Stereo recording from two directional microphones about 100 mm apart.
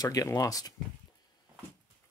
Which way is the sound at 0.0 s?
35° left (ahead or behind).